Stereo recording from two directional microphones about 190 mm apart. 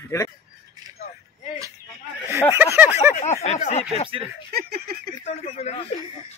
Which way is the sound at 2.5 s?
10° right (ahead or behind).